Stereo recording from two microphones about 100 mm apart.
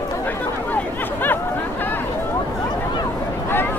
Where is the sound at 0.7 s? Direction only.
20° left (ahead or behind).